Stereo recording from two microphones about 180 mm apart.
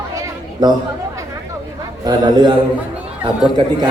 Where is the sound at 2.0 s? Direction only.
25° right (ahead or behind).